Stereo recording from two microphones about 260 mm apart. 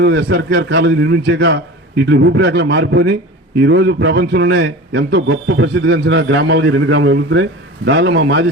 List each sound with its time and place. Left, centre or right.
0.0 s a man's voice: right